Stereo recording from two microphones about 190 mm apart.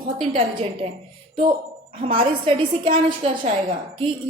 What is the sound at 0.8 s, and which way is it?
Speech, 30° right (ahead or behind).